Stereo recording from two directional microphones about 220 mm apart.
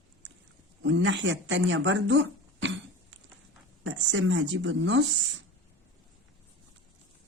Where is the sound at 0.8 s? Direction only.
55° right (ahead or behind).